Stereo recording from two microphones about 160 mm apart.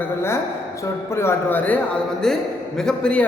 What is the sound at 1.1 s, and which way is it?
A man's voice, 15° left (ahead or behind).